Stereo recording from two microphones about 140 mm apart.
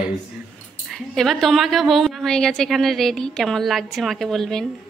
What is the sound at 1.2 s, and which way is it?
A woman's voice, centre (ahead or behind).